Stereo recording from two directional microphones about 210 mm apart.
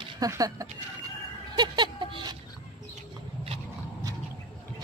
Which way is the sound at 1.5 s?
20° right (ahead or behind).